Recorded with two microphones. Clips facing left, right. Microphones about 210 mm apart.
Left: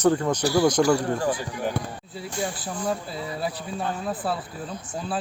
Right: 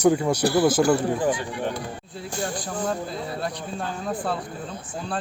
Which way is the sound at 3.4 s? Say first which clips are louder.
Left 1 dB; 5° left (ahead or behind).